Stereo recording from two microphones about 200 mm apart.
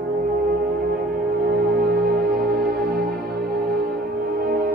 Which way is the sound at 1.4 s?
50° right (ahead or behind).